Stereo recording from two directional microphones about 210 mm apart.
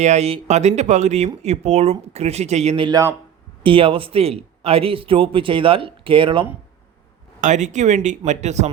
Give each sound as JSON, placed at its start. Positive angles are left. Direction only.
{"t": 0.0, "sound": "a man's voice", "side_deg": -30}
{"t": 7.4, "sound": "speech", "side_deg": -35}